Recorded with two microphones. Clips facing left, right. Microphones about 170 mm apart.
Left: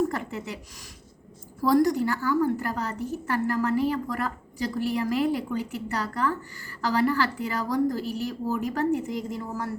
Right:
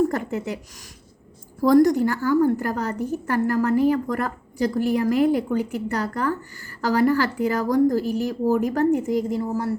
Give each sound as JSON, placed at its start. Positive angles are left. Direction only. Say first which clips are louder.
{"t": 0.1, "sound": "a woman's voice", "louder": "right 6 dB", "side_deg": -45}
{"t": 1.6, "sound": "a woman's voice", "louder": "right 5 dB", "side_deg": -45}